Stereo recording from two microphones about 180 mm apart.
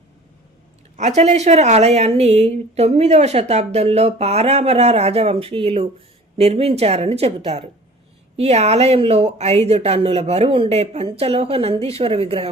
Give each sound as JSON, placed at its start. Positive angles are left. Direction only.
{"t": 0.9, "sound": "a woman's voice", "side_deg": -40}